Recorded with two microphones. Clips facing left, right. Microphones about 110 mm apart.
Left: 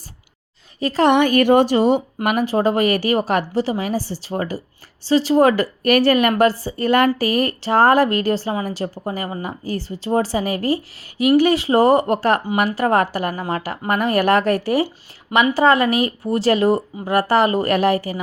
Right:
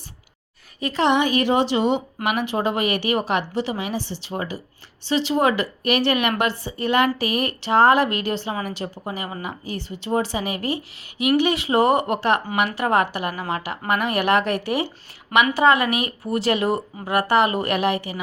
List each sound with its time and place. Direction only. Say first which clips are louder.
0.8 s a woman's voice: left 5 dB; 35° left (ahead or behind)
1.0 s a woman's voice: left 5 dB; 50° left (ahead or behind)